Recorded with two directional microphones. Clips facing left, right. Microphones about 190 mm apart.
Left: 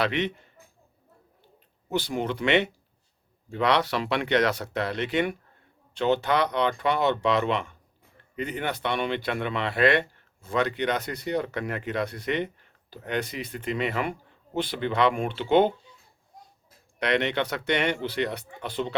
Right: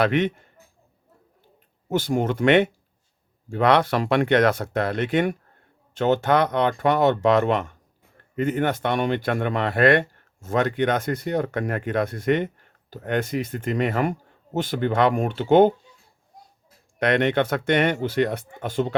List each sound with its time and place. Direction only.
0.0 s speech: 50° right (ahead or behind)
1.9 s speech: 50° right (ahead or behind)
17.0 s speech: 50° right (ahead or behind)